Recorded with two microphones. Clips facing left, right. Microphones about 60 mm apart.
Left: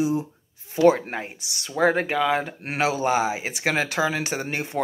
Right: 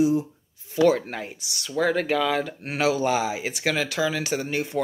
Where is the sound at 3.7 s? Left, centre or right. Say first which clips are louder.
Left 2 dB; left.